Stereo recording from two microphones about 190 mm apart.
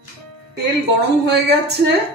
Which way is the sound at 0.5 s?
60° right (ahead or behind).